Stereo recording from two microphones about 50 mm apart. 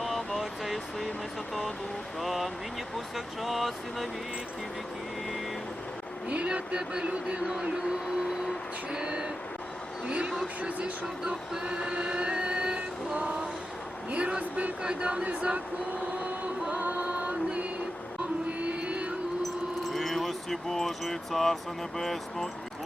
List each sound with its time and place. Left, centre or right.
0.0 s vehicle: centre
2.2 s speech: centre
6.2 s speech: right; by 8.5 s centre
8.9 s speech: centre
11.0 s music: centre
14.1 s speech: right
16.6 s music: right
19.9 s speech: centre